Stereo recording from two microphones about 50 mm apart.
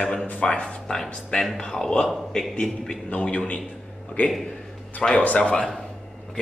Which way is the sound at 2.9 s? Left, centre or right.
Left.